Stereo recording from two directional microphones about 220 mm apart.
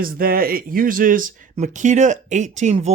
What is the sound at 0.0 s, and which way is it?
Speech, 40° right (ahead or behind).